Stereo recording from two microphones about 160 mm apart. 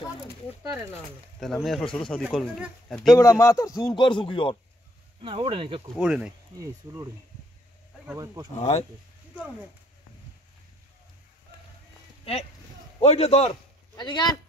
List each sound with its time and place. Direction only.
1.4 s speech: centre (ahead or behind)
3.1 s a man's voice: 20° left (ahead or behind)
5.2 s speech: 35° right (ahead or behind)
5.9 s speech: 5° right (ahead or behind)
6.6 s speech: 20° right (ahead or behind)
8.5 s speech: 40° left (ahead or behind)
12.3 s a man's voice: 35° left (ahead or behind)